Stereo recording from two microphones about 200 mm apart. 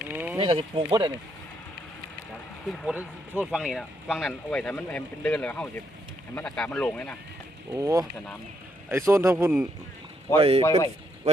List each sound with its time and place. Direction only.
0.1 s a sound: 10° right (ahead or behind)
0.3 s speech: 25° right (ahead or behind)
2.6 s speech: 5° right (ahead or behind)
7.7 s a man's voice: 15° right (ahead or behind)
10.3 s speech: 30° right (ahead or behind)
10.6 s a man's voice: 15° left (ahead or behind)